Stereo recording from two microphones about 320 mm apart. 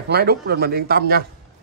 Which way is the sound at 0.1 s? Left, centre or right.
Right.